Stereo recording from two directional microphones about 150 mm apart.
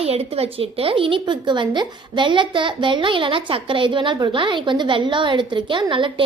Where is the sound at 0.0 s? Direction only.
40° right (ahead or behind).